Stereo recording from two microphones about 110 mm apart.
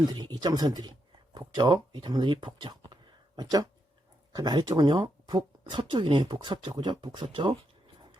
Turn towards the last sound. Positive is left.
turn(degrees=-45)  # may be behind; listen again after turning